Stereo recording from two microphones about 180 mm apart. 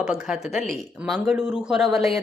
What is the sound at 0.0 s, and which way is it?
A woman's voice, 5° right (ahead or behind).